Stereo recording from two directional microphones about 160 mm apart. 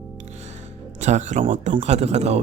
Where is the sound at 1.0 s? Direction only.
45° right (ahead or behind).